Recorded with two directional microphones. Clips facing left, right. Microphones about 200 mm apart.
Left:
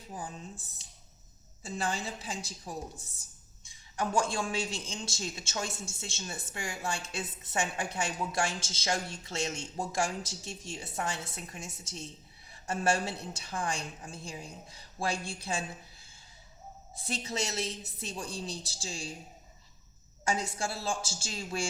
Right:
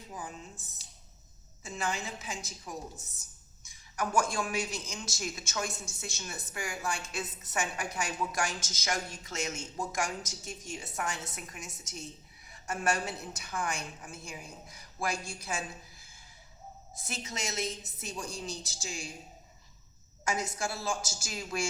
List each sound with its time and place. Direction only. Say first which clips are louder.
0.1 s speech: left 2 dB; 30° left (ahead or behind)
1.6 s a woman's voice: left 1 dB; 35° left (ahead or behind)
17.0 s a woman's voice: left 4 dB; 30° left (ahead or behind)
20.6 s a man's voice: even; 30° left (ahead or behind)